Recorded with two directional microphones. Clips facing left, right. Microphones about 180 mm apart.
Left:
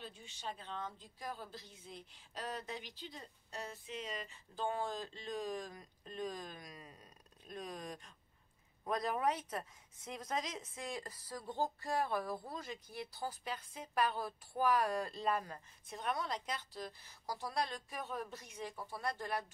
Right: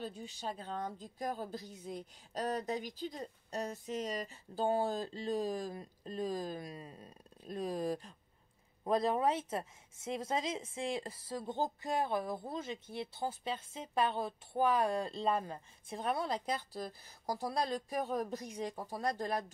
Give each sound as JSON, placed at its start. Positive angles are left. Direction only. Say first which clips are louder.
{"t": 0.0, "sound": "a woman's voice", "louder": "right 6 dB", "side_deg": -40}